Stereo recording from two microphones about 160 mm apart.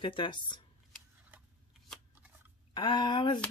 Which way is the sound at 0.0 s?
30° left (ahead or behind).